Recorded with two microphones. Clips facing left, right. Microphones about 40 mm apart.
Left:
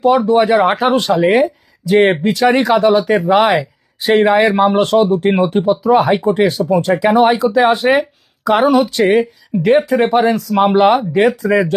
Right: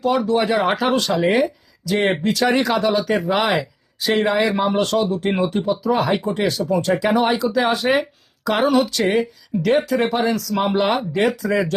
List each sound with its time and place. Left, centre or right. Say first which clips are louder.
0.0 s speech: left 7 dB; centre
0.9 s speech: left 6 dB; left
1.3 s speech: left 5 dB; left
1.8 s speech: left 8 dB; left
2.5 s speech: left 6 dB; centre
2.7 s speech: left 7 dB; left; by 8.9 s centre
8.9 s speech: left 6 dB; left
10.1 s speech: left 7 dB; left
11.4 s speech: left 6 dB; centre